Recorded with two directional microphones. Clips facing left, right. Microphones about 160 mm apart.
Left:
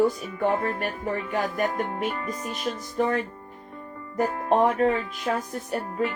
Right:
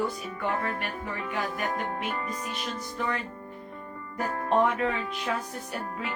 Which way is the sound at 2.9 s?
45° left (ahead or behind).